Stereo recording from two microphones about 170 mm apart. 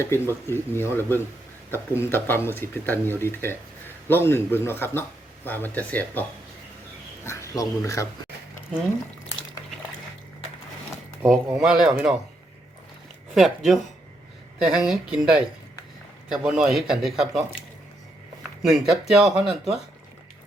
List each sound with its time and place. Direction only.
0.0 s speech: 15° left (ahead or behind)
7.3 s speech: 20° left (ahead or behind)
11.2 s speech: centre (ahead or behind)
13.3 s speech: centre (ahead or behind)
18.9 s speech: 5° right (ahead or behind)